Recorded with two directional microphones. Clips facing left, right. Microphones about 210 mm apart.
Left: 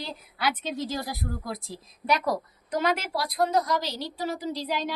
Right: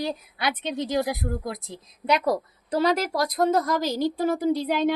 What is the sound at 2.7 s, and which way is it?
A woman's voice, 35° right (ahead or behind).